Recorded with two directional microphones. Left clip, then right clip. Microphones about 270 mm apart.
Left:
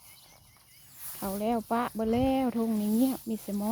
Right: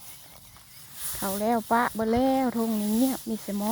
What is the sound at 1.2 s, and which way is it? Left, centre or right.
Speech, centre.